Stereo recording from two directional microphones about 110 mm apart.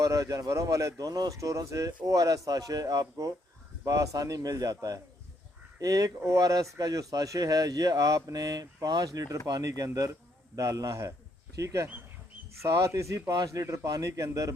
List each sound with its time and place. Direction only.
0.0 s a man's voice: 30° right (ahead or behind)